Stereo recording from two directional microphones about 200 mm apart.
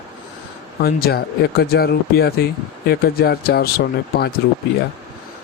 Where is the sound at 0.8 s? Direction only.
50° left (ahead or behind).